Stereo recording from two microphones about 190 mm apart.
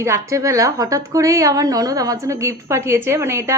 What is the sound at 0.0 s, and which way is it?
A woman's voice, 15° right (ahead or behind).